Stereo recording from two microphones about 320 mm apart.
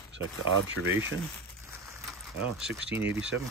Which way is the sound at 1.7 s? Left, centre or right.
Centre.